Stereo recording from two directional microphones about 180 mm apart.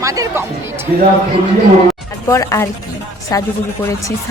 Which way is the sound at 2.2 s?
15° left (ahead or behind).